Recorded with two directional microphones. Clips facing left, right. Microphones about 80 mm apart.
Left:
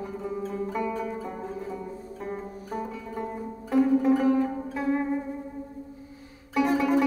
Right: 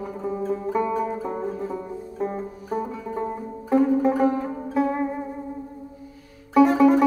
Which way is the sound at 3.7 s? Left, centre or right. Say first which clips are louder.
Right 2 dB; right.